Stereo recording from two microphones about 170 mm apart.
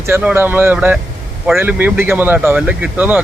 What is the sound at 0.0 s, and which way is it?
Speech, 10° right (ahead or behind).